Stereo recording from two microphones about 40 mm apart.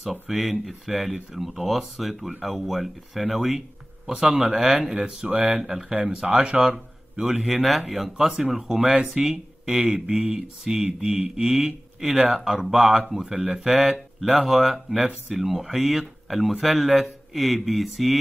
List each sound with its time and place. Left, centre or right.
0.0 s speech: centre
5.0 s speech: right
5.7 s speech: centre
6.1 s mantra: right
7.2 s speech: centre
10.8 s mantra: right
11.5 s speech: centre